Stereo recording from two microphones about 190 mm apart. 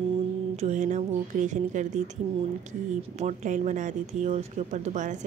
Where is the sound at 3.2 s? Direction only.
40° right (ahead or behind).